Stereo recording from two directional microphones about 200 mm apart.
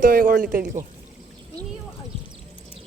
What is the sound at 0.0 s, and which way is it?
Speech, 45° right (ahead or behind).